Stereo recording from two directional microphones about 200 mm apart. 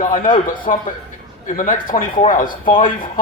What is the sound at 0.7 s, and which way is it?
Speech, 40° left (ahead or behind).